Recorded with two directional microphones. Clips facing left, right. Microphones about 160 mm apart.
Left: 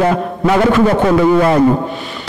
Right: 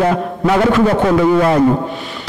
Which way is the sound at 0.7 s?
30° left (ahead or behind).